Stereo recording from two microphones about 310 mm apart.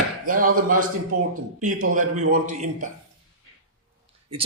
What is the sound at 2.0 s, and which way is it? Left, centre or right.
Speech, right.